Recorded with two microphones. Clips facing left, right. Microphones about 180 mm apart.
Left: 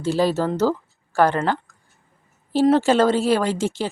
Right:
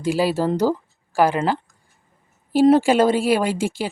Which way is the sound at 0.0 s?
10° right (ahead or behind).